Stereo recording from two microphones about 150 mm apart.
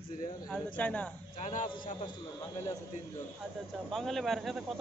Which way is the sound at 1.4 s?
60° left (ahead or behind).